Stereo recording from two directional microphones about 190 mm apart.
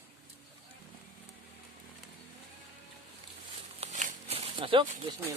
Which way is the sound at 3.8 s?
35° right (ahead or behind).